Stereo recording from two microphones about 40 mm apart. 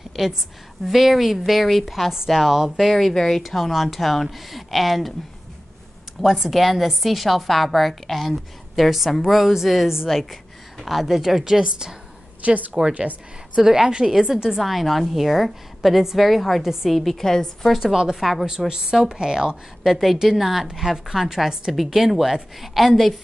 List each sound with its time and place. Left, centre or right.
0.2 s a woman's voice: centre
3.1 s a woman's voice: centre
6.2 s a woman's voice: centre
10.1 s a woman's voice: centre
10.8 s a woman's voice: centre
12.4 s a woman's voice: right
13.6 s a woman's voice: centre
13.8 s a woman's voice: right
14.6 s a woman's voice: centre
17.9 s a woman's voice: centre
19.8 s a woman's voice: centre